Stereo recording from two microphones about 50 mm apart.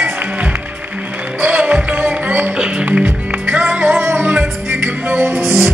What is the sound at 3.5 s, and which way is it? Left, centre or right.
Music, right.